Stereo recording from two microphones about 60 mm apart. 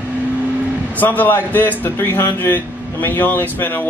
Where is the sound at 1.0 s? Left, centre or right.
Left.